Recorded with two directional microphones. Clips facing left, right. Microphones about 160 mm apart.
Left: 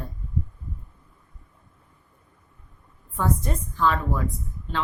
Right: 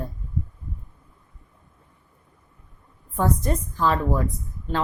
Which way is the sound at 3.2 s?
40° right (ahead or behind).